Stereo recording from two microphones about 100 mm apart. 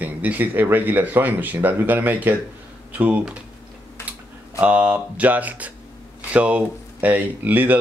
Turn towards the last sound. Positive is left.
turn(degrees=-15)  # may be behind; listen again after turning